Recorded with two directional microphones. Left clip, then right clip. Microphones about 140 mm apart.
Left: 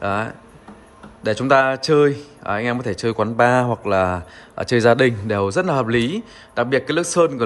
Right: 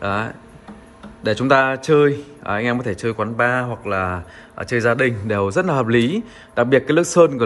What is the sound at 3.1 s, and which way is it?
A man's voice, 25° left (ahead or behind).